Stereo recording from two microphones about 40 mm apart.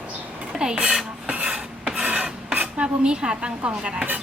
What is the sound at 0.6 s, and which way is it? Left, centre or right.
Speech, centre.